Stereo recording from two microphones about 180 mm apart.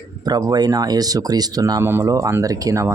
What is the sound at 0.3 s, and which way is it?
Speech, 20° right (ahead or behind).